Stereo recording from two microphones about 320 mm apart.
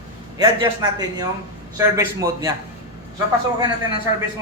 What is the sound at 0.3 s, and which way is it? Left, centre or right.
A man's voice, centre.